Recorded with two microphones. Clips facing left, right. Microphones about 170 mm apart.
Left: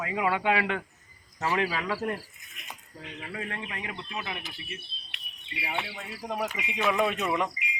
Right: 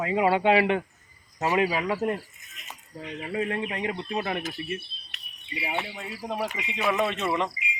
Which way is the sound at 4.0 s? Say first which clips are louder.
Right 8 dB; 40° right (ahead or behind).